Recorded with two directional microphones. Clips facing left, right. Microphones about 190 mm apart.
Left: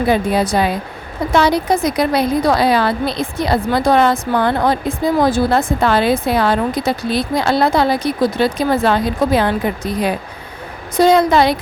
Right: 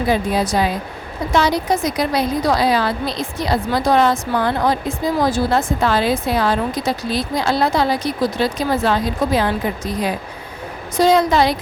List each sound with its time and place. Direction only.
0.1 s a woman's voice: 60° left (ahead or behind)